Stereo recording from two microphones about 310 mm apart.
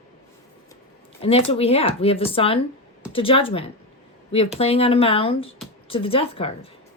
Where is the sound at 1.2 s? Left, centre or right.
Centre.